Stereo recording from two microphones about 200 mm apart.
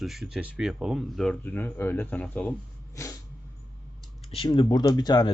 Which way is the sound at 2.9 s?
15° left (ahead or behind).